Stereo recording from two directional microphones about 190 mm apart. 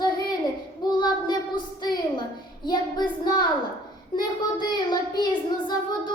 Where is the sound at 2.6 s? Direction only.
25° left (ahead or behind).